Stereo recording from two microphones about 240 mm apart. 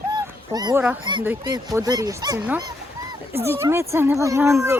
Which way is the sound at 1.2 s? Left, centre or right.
Centre.